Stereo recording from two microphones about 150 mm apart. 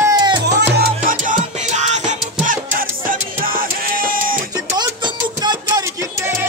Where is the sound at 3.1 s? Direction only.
70° right (ahead or behind).